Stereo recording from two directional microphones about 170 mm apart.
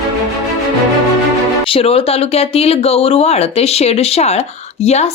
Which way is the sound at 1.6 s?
35° left (ahead or behind).